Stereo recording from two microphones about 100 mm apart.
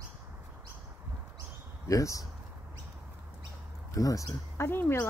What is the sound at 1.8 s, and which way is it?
Speech, 35° left (ahead or behind).